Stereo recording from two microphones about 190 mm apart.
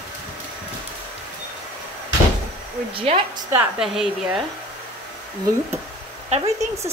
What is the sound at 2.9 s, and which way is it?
Speech, 30° right (ahead or behind).